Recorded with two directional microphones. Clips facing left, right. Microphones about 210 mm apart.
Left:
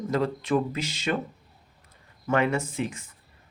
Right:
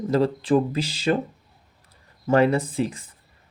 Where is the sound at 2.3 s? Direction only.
35° right (ahead or behind).